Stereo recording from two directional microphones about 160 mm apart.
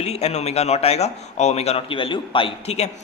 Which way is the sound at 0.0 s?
40° left (ahead or behind).